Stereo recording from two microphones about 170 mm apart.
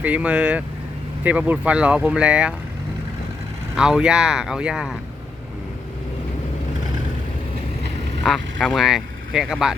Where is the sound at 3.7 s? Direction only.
5° right (ahead or behind).